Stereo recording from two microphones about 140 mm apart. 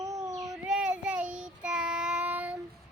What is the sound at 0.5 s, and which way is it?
Child singing, 5° right (ahead or behind).